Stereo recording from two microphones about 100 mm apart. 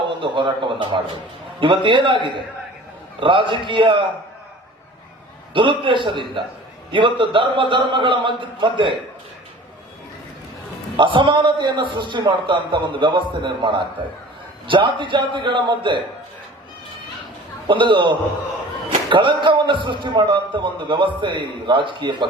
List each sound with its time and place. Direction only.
0.0 s a man's voice: 55° right (ahead or behind)
5.5 s a man's voice: 55° right (ahead or behind)
10.9 s a man's voice: 55° right (ahead or behind)
17.7 s speech: 55° right (ahead or behind)